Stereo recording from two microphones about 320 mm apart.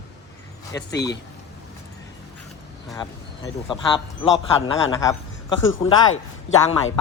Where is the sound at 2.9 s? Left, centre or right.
Centre.